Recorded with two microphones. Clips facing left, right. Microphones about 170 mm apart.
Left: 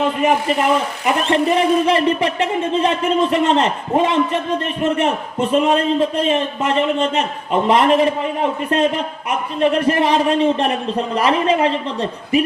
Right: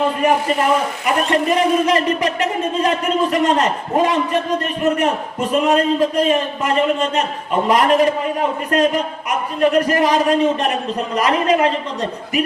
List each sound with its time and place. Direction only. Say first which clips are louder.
1.0 s a man's voice: left 2 dB; 30° left (ahead or behind)